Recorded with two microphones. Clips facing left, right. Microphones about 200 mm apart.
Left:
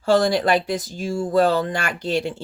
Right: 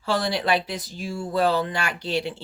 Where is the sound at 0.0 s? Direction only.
45° left (ahead or behind).